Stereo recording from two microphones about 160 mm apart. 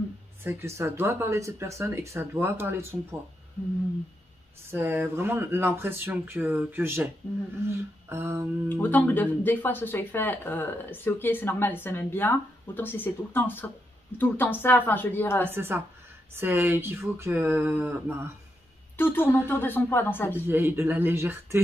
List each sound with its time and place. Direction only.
0.4 s speech: 15° right (ahead or behind)
4.6 s speech: 15° right (ahead or behind)
8.1 s speech: 15° right (ahead or behind)
8.6 s speech: 10° left (ahead or behind)
15.5 s speech: 15° right (ahead or behind)
18.9 s speech: 15° left (ahead or behind)
20.4 s speech: 15° right (ahead or behind)